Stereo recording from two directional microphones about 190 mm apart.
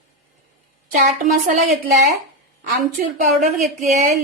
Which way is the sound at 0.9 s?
45° right (ahead or behind).